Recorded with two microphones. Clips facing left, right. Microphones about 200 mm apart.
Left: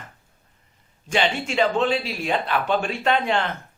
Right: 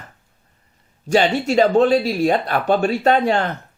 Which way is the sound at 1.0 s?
40° right (ahead or behind).